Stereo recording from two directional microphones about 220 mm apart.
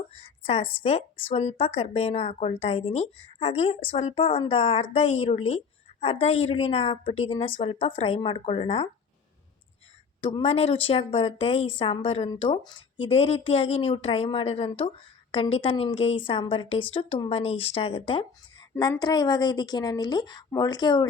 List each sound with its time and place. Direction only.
0.2 s a woman's voice: 25° left (ahead or behind)
10.2 s a woman's voice: 25° left (ahead or behind)